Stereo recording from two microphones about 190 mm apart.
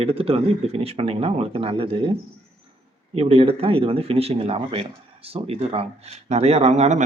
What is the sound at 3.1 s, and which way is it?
Speech, 30° right (ahead or behind).